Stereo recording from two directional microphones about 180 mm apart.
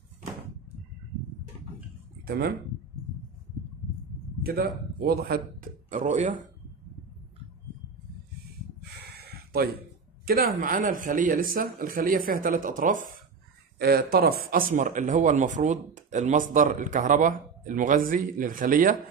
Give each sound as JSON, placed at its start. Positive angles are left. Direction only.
{"t": 2.2, "sound": "speech", "side_deg": -60}
{"t": 4.4, "sound": "a man's voice", "side_deg": -55}
{"t": 9.0, "sound": "a sound", "side_deg": -60}
{"t": 10.2, "sound": "speech", "side_deg": -55}
{"t": 13.7, "sound": "speech", "side_deg": -60}